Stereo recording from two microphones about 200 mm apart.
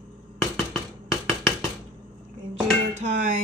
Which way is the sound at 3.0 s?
40° right (ahead or behind).